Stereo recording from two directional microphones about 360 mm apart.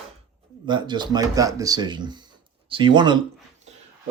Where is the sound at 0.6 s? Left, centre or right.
Centre.